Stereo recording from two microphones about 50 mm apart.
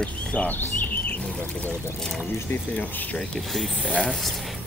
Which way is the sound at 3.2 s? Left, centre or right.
Centre.